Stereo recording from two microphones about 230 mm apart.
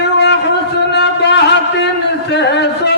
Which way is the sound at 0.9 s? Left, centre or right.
Left.